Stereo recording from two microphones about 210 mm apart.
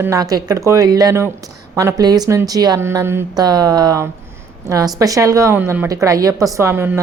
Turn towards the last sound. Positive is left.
turn(degrees=-10)  # may be behind; listen again after turning